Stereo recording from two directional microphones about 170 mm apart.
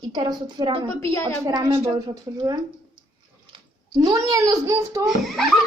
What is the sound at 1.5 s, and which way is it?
A child's voice, 25° right (ahead or behind).